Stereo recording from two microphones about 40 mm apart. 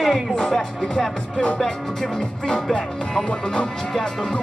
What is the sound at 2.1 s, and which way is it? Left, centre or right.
Music, centre.